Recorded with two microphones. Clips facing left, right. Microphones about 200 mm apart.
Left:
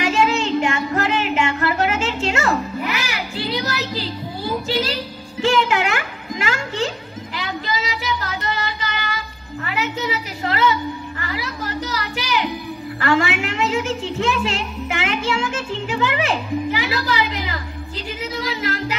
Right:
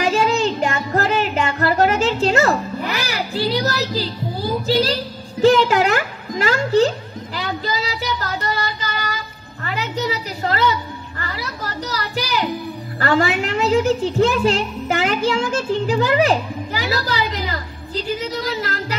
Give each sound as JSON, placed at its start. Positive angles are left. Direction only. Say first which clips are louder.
{"t": 0.0, "sound": "music", "louder": "right 2 dB", "side_deg": -40}
{"t": 5.4, "sound": "a woman's voice", "louder": "right 5 dB", "side_deg": -40}
{"t": 7.3, "sound": "child singing", "louder": "right 2 dB", "side_deg": -40}
{"t": 9.7, "sound": "a sound", "louder": "right 1 dB", "side_deg": -40}
{"t": 13.0, "sound": "music", "louder": "right 2 dB", "side_deg": -40}